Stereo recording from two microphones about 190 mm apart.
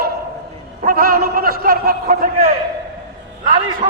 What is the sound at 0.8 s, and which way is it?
A man's voice, 50° right (ahead or behind).